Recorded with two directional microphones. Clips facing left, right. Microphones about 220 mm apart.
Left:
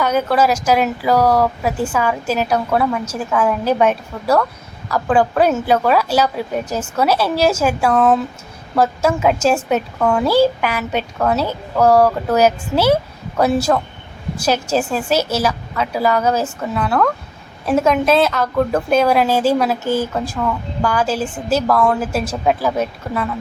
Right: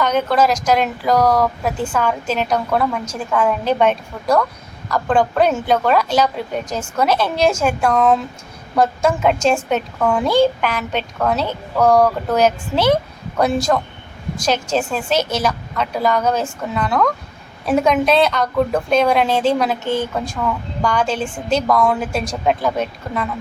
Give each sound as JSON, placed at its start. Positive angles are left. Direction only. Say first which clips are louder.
{"t": 0.0, "sound": "a woman's voice", "louder": "even", "side_deg": 5}